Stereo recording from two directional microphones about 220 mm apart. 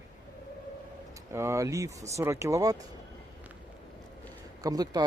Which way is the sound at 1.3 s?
10° right (ahead or behind).